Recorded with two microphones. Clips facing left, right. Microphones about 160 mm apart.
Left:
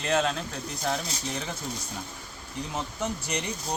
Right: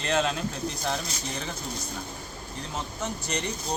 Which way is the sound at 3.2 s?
10° left (ahead or behind).